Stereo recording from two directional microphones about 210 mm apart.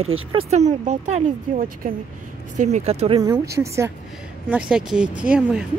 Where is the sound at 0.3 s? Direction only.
30° right (ahead or behind).